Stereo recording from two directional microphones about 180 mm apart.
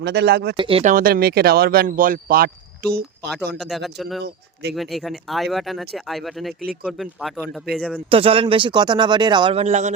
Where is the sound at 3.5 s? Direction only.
Centre (ahead or behind).